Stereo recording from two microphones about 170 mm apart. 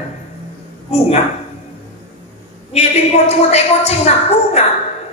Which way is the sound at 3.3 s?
40° left (ahead or behind).